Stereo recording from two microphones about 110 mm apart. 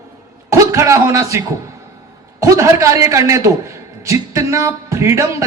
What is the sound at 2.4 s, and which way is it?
Speech, 30° right (ahead or behind).